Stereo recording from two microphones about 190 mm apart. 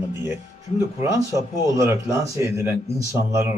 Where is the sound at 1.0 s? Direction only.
15° right (ahead or behind).